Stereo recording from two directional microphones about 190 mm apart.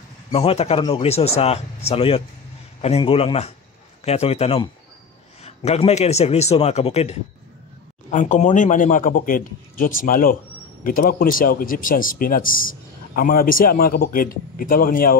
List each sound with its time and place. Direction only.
0.3 s a man's voice: 30° left (ahead or behind); by 15.1 s 50° left (ahead or behind)